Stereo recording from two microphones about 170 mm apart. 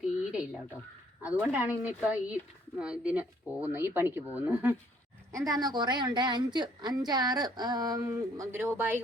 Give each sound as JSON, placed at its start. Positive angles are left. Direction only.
{"t": 0.3, "sound": "a sound", "side_deg": -5}
{"t": 1.2, "sound": "speech", "side_deg": -10}
{"t": 5.5, "sound": "a woman's voice", "side_deg": -25}